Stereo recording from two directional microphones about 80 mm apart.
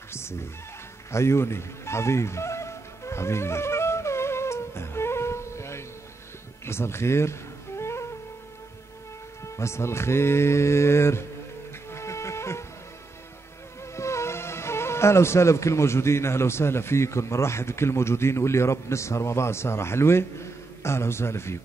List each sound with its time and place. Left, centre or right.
0.1 s music: left
6.6 s a sound: left
9.4 s music: left
13.9 s speech: left